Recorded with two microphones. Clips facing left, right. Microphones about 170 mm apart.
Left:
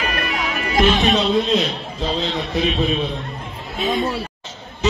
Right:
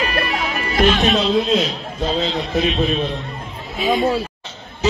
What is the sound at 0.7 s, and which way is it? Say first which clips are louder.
Music: even; 40° right (ahead or behind).